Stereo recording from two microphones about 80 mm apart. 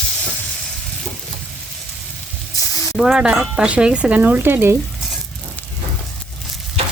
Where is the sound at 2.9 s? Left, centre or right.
Centre; by 4.8 s right.